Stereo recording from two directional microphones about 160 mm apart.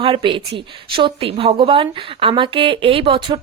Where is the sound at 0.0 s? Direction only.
30° right (ahead or behind).